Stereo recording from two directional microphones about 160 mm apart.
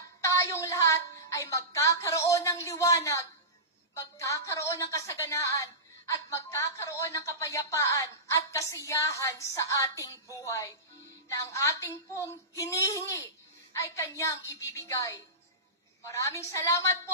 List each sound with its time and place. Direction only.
0.2 s a woman's voice: 15° left (ahead or behind)